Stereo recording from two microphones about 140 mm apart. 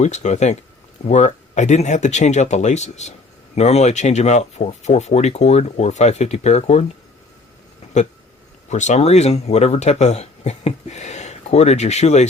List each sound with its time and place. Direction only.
0.0 s speech: 55° left (ahead or behind)
8.7 s speech: 55° left (ahead or behind)